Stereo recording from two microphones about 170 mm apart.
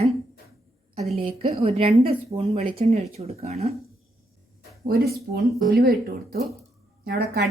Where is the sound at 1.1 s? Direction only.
35° right (ahead or behind).